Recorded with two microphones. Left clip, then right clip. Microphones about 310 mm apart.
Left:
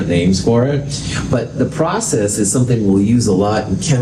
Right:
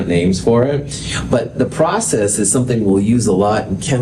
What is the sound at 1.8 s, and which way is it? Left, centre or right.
Speech, right.